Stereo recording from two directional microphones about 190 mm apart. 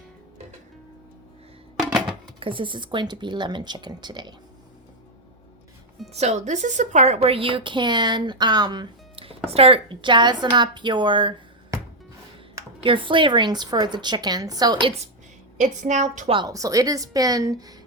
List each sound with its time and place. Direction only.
1.8 s music: centre (ahead or behind)
2.4 s a woman's voice: 25° right (ahead or behind)
6.1 s a woman's voice: 35° right (ahead or behind)
12.8 s a woman's voice: 25° right (ahead or behind)
15.5 s a woman's voice: 40° right (ahead or behind)
16.3 s a woman's voice: 20° right (ahead or behind)